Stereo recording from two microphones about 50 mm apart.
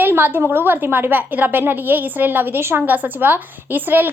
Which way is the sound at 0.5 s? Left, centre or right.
Right.